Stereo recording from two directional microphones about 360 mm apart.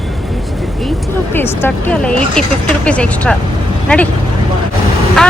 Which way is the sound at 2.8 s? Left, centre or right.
Centre.